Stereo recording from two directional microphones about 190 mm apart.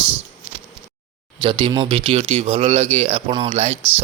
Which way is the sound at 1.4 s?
25° right (ahead or behind).